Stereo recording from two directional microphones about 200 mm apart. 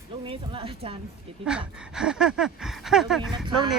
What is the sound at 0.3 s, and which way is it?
Speech, 25° right (ahead or behind).